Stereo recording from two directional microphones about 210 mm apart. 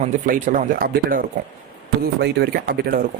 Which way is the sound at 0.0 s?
40° right (ahead or behind).